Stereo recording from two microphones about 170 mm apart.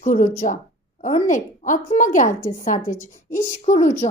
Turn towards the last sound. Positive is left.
turn(degrees=45)  # may be behind; listen again after turning